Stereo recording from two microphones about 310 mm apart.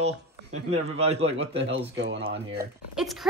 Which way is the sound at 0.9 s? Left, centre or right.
Centre.